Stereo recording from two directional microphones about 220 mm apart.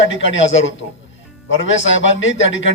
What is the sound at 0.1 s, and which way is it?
A man's voice, 60° left (ahead or behind).